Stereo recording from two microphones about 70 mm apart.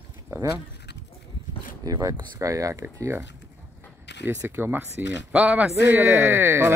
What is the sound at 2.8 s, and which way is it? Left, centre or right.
Speech, right.